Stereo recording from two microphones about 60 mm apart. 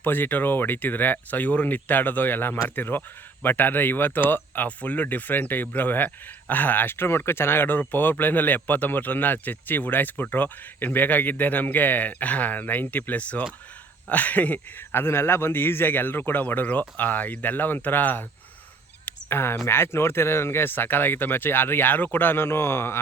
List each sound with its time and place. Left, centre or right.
0.0 s speech: left
14.9 s speech: left
19.0 s goose: left
19.6 s speech: left